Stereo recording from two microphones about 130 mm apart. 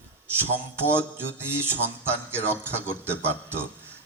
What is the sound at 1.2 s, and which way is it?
A man's voice, 20° right (ahead or behind).